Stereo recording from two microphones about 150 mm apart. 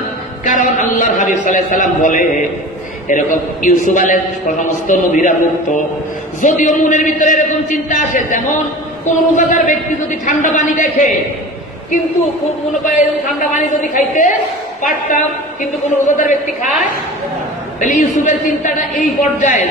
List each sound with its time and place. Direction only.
0.5 s a man's voice: 55° left (ahead or behind)
13.4 s a man's voice: 60° left (ahead or behind)